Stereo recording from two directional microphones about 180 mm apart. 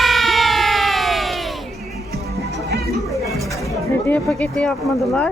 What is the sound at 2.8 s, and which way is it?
Music, centre (ahead or behind).